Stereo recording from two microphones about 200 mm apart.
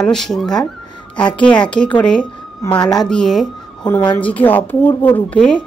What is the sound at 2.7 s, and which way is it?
Speech, 20° left (ahead or behind).